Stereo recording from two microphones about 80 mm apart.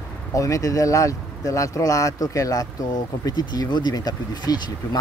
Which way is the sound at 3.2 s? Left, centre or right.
Left.